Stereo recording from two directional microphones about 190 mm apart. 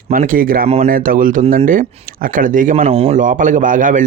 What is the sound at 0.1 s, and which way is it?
Speech, 45° right (ahead or behind).